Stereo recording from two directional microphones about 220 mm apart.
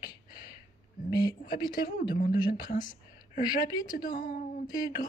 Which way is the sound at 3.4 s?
20° left (ahead or behind).